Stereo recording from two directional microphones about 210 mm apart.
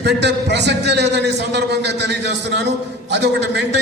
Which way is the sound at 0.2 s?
55° right (ahead or behind).